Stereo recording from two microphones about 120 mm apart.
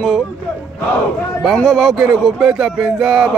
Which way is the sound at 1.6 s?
5° right (ahead or behind).